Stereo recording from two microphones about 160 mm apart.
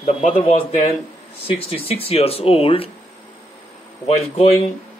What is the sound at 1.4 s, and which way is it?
Speech, 35° left (ahead or behind).